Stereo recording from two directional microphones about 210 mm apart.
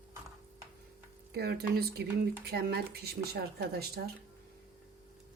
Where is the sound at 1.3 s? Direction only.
50° right (ahead or behind).